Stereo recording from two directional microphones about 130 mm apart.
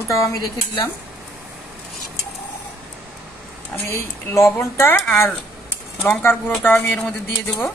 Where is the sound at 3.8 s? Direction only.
20° left (ahead or behind).